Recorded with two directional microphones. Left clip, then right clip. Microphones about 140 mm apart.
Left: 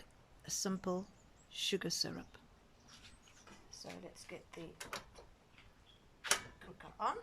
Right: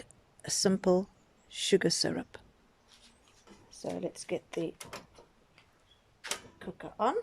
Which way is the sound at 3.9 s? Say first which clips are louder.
Right 15 dB; 90° right.